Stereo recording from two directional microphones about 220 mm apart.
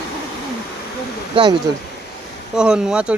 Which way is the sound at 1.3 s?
20° right (ahead or behind).